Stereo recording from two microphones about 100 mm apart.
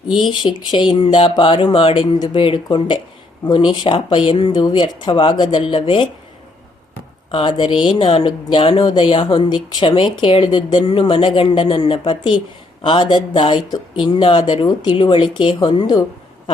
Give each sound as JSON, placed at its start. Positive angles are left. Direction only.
{"t": 0.1, "sound": "speech", "side_deg": 50}
{"t": 4.3, "sound": "speech", "side_deg": 50}
{"t": 7.3, "sound": "speech", "side_deg": 60}